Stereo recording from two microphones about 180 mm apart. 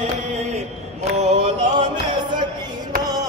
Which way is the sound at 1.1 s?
35° right (ahead or behind).